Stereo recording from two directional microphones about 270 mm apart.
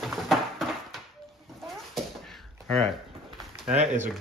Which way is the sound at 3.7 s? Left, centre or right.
Right.